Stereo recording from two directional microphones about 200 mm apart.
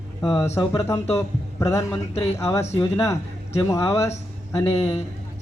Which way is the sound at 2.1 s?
30° left (ahead or behind).